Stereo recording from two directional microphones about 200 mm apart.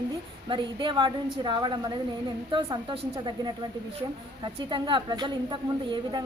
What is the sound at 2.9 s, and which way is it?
Speech, 25° right (ahead or behind).